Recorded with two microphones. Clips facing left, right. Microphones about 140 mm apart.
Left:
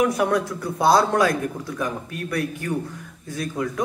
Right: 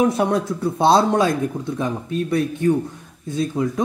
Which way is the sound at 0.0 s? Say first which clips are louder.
Right 2 dB; 25° right (ahead or behind).